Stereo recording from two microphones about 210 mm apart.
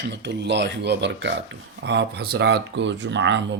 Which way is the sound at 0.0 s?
55° right (ahead or behind).